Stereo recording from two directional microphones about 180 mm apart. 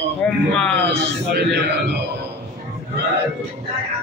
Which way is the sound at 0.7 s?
80° right.